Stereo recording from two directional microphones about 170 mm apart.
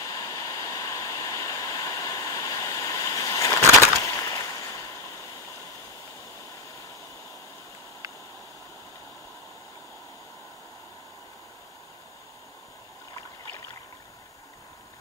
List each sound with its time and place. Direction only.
0.0 s waterfall: 20° left (ahead or behind)